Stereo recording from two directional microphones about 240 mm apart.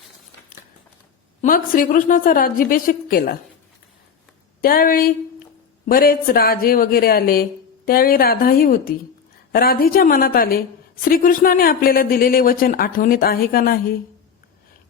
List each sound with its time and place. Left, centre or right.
1.4 s speech: left
4.6 s speech: left